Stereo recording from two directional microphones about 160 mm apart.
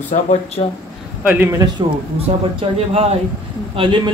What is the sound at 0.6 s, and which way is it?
Speech, 35° left (ahead or behind).